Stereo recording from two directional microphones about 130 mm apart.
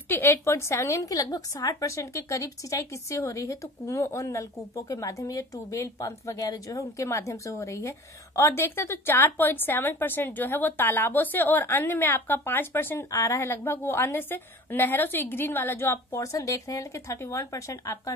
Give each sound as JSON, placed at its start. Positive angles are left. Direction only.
{"t": 0.1, "sound": "a woman's voice", "side_deg": 20}